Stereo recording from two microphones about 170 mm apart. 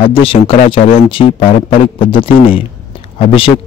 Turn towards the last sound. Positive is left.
turn(degrees=30)  # may be behind; listen again after turning